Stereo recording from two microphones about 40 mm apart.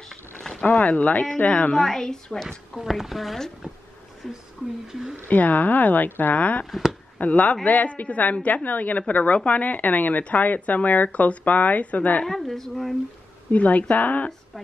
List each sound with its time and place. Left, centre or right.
0.6 s speech: left
1.8 s a woman's voice: centre
2.7 s speech: centre
5.3 s speech: left
12.3 s a woman's voice: centre
13.5 s speech: left